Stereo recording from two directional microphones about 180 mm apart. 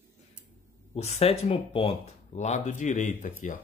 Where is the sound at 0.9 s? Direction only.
35° left (ahead or behind).